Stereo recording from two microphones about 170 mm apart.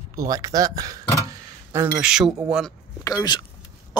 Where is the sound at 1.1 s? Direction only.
15° right (ahead or behind).